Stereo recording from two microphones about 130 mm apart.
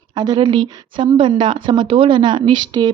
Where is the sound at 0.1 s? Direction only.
35° right (ahead or behind).